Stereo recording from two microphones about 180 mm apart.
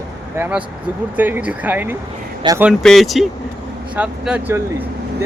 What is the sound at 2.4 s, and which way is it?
Speech, 25° right (ahead or behind).